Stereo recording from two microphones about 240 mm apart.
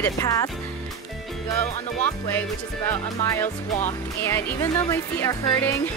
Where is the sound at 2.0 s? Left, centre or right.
Centre.